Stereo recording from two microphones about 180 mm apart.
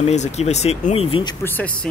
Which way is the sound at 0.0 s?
40° left (ahead or behind).